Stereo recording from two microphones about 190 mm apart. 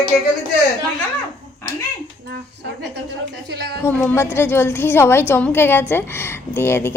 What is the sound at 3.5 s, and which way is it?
Speech, 60° right (ahead or behind).